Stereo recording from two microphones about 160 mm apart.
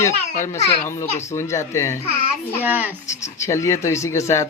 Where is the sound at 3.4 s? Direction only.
20° left (ahead or behind).